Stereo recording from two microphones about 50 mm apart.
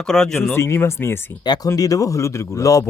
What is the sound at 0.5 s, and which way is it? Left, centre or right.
Speech, left.